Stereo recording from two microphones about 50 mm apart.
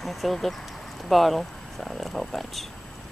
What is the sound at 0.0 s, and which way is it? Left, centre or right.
Speech, centre.